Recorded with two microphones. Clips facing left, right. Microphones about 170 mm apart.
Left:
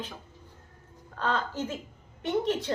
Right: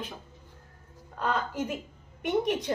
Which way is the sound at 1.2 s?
10° right (ahead or behind).